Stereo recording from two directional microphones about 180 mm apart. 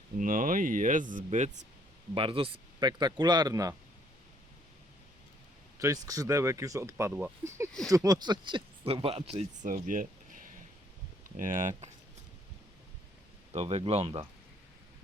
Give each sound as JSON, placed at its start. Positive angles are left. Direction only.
{"t": 0.2, "sound": "speech", "side_deg": -50}
{"t": 2.1, "sound": "speech", "side_deg": -30}
{"t": 5.8, "sound": "speech", "side_deg": -20}
{"t": 11.3, "sound": "speech", "side_deg": -45}
{"t": 13.5, "sound": "speech", "side_deg": -35}